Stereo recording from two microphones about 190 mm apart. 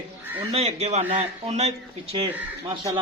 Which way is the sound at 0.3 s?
35° right (ahead or behind).